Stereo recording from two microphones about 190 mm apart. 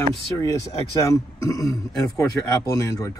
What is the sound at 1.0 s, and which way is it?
A man's voice, 15° left (ahead or behind).